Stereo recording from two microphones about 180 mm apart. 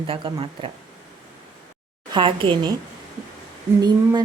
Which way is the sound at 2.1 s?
25° right (ahead or behind).